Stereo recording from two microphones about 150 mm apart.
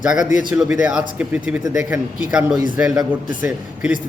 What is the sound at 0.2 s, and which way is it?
Speech, 60° left (ahead or behind).